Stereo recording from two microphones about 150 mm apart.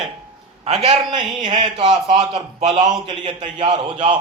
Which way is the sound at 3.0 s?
30° right (ahead or behind).